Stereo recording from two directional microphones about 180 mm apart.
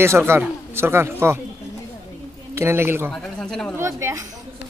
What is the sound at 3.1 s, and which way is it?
Speech, 5° left (ahead or behind).